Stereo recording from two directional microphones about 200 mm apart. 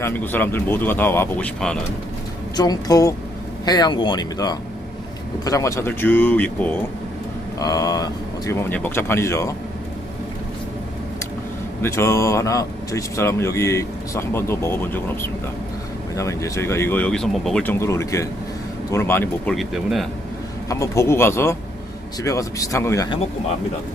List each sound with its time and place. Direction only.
0.0 s speech: 10° left (ahead or behind)
2.6 s speech: 20° left (ahead or behind)
11.8 s speech: 15° left (ahead or behind)
19.5 s speech: centre (ahead or behind)
20.7 s speech: 15° left (ahead or behind)